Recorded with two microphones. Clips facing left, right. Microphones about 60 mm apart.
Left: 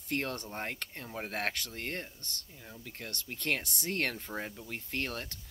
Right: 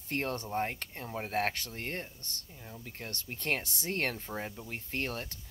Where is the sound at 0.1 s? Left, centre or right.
Right.